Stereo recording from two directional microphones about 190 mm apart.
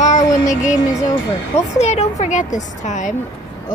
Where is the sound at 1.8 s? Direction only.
35° left (ahead or behind).